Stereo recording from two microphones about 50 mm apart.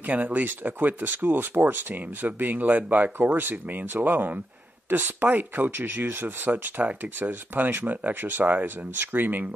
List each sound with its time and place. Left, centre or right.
0.0 s speech: right